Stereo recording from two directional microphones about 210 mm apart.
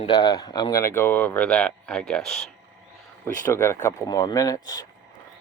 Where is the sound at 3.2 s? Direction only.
10° left (ahead or behind).